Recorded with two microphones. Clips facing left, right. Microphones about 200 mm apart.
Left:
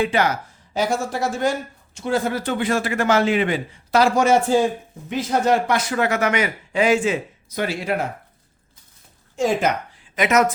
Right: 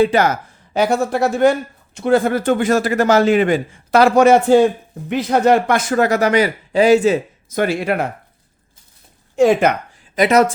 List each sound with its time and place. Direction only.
0.0 s speech: 40° right (ahead or behind)
0.7 s speech: 60° right (ahead or behind)
9.3 s speech: 65° right (ahead or behind)
10.2 s speech: 35° right (ahead or behind)